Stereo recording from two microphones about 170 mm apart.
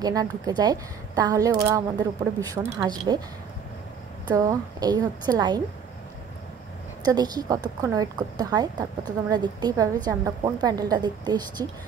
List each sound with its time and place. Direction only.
0.0 s a woman's voice: 20° right (ahead or behind)
4.3 s a woman's voice: 20° right (ahead or behind)
7.1 s a woman's voice: 25° right (ahead or behind)